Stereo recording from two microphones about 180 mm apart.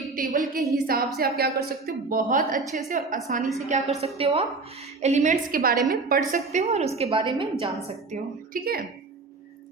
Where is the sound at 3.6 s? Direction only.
40° right (ahead or behind).